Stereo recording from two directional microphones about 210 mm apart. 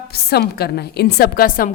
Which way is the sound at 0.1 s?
50° left (ahead or behind).